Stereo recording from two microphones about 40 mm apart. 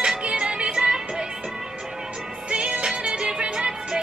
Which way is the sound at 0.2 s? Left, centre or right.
Right.